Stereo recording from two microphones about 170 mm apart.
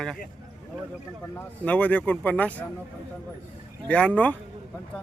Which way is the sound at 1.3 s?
10° left (ahead or behind).